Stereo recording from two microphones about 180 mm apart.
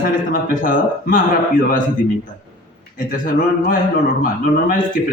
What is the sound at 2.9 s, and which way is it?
A man's voice, 50° left (ahead or behind).